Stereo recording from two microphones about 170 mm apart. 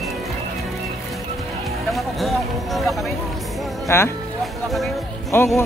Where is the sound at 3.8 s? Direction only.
15° left (ahead or behind).